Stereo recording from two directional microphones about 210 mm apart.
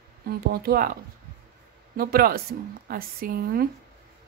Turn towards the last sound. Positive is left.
turn(degrees=-45)  # may be behind; listen again after turning